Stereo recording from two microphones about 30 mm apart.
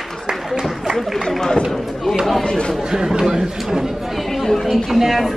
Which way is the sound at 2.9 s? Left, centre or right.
Centre.